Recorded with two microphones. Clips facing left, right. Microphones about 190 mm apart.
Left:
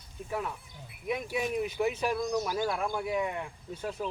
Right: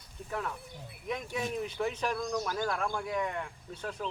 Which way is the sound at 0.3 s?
10° left (ahead or behind).